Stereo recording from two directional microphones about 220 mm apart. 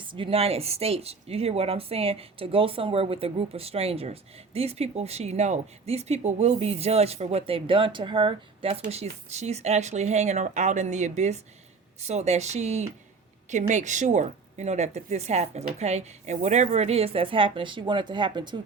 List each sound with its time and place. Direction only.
0.0 s speech: 25° right (ahead or behind)